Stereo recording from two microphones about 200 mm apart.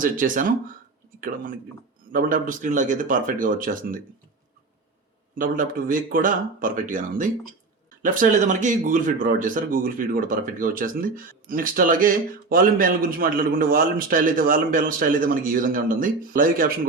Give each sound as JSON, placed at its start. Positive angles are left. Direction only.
{"t": 0.0, "sound": "speech", "side_deg": -40}
{"t": 2.1, "sound": "speech", "side_deg": -40}
{"t": 5.4, "sound": "speech", "side_deg": -45}